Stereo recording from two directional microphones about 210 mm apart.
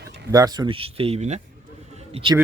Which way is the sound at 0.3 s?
15° right (ahead or behind).